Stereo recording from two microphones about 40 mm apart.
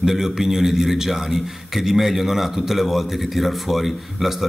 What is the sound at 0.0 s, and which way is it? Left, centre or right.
A man's voice, centre.